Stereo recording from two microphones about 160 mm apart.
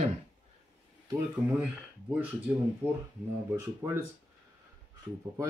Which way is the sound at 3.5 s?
15° right (ahead or behind).